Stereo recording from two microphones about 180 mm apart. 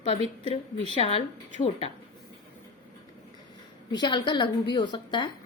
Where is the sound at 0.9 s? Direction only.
35° left (ahead or behind).